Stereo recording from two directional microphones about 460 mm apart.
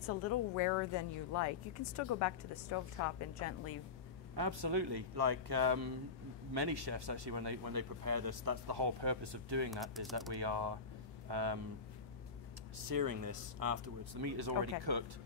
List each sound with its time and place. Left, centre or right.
0.2 s speech: left
4.4 s speech: right
9.7 s speech: centre
10.3 s speech: right
12.9 s speech: right